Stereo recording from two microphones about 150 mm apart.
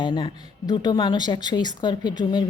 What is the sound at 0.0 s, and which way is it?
A woman's voice, 30° left (ahead or behind).